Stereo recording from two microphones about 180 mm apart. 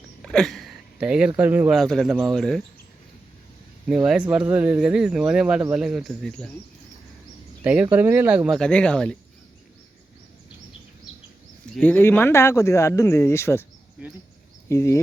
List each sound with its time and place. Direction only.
0.2 s a sound: centre (ahead or behind)
1.3 s speech: 10° right (ahead or behind)
3.8 s speech: 5° right (ahead or behind)
7.6 s speech: 10° right (ahead or behind)
8.4 s speech: 5° left (ahead or behind)
11.8 s speech: 10° left (ahead or behind)
14.7 s speech: 15° left (ahead or behind)